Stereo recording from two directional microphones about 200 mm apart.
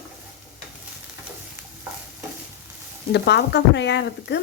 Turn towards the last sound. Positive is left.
turn(degrees=60)  # may be behind; listen again after turning